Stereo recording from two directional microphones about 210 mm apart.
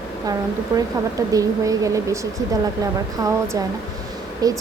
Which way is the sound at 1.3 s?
15° right (ahead or behind).